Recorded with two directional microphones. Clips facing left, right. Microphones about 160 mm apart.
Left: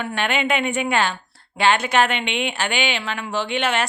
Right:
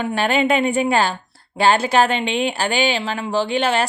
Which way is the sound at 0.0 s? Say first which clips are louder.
Right 5 dB; 35° right (ahead or behind).